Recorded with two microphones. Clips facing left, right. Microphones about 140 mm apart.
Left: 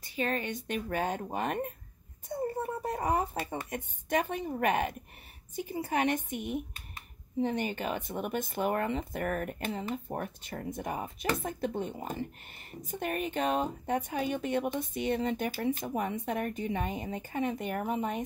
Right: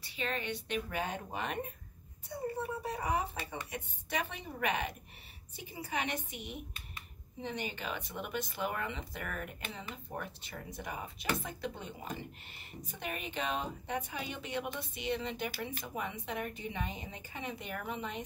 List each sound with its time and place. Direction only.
0.0 s speech: 45° left (ahead or behind)